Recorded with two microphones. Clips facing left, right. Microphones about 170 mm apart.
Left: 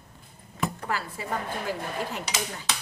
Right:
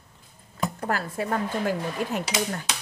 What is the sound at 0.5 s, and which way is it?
Speech, 45° right (ahead or behind).